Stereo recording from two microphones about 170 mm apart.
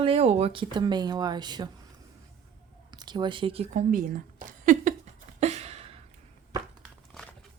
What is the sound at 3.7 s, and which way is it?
Speech, 50° right (ahead or behind).